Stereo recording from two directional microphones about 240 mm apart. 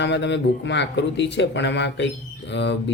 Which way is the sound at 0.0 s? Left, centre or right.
Left.